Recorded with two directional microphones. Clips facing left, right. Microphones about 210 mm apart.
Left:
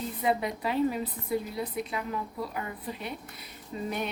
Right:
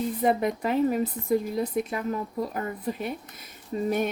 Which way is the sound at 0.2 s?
45° right (ahead or behind).